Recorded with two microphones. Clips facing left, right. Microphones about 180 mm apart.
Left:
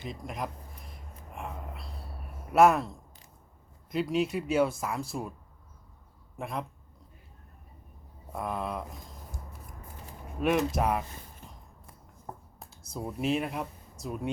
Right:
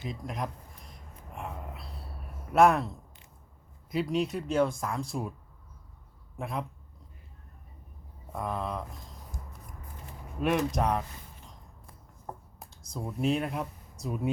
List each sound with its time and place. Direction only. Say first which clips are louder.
0.0 s a sound: right 1 dB; centre (ahead or behind)
2.5 s speech: left 1 dB; centre (ahead or behind)
6.3 s speech: even; centre (ahead or behind)
8.3 s speech: even; 5° left (ahead or behind)
10.4 s speech: left 1 dB; centre (ahead or behind)
12.7 s speech: left 1 dB; 5° left (ahead or behind)